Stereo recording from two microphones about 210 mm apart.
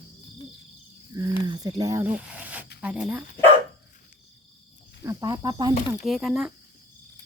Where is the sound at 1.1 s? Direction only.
20° right (ahead or behind).